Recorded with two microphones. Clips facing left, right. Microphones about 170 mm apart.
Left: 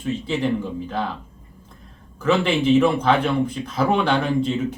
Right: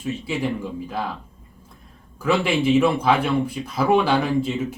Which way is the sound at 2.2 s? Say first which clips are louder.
Left 1 dB; 10° right (ahead or behind).